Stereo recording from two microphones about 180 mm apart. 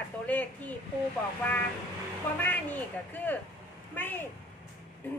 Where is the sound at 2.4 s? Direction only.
10° left (ahead or behind).